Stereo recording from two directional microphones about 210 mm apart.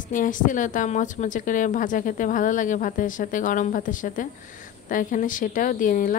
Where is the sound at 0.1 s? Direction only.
40° left (ahead or behind).